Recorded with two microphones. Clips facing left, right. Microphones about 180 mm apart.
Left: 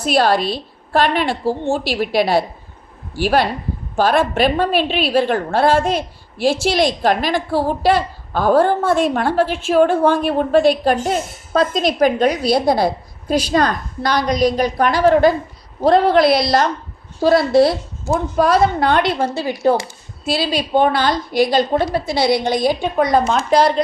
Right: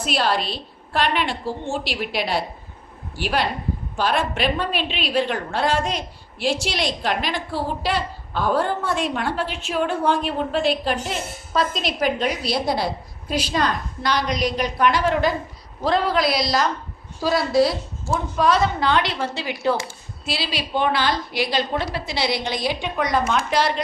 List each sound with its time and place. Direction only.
0.0 s a woman's voice: 40° left (ahead or behind)
16.3 s a woman's voice: 60° left (ahead or behind); by 23.8 s 35° left (ahead or behind)